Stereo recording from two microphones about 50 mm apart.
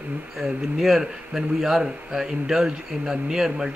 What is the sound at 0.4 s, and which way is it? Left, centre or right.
A man's voice, centre.